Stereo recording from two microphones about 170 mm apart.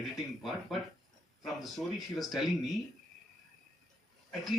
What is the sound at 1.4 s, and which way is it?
Speech, centre (ahead or behind).